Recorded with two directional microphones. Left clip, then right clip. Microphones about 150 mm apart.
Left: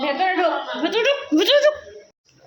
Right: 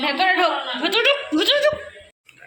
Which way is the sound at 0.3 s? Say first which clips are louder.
Right 1 dB; 25° left (ahead or behind).